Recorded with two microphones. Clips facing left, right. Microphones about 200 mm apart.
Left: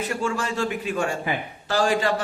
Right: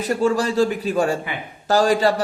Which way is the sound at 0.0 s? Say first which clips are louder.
Right 7 dB; 35° right (ahead or behind).